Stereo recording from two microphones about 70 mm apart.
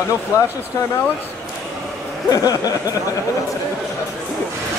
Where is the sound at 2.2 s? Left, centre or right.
Left.